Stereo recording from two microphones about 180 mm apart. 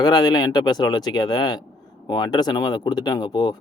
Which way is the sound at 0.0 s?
20° left (ahead or behind).